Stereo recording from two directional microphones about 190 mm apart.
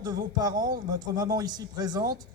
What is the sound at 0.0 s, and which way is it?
A man's voice, 20° right (ahead or behind).